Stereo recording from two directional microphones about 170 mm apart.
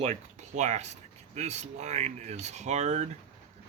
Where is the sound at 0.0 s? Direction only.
45° right (ahead or behind).